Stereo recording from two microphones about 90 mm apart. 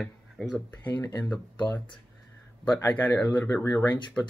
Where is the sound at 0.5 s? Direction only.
20° left (ahead or behind).